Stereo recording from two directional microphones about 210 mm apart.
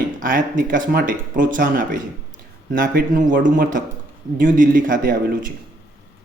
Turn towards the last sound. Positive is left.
turn(degrees=-40)  # may be behind; listen again after turning